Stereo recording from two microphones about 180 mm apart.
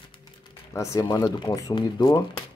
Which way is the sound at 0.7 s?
15° left (ahead or behind).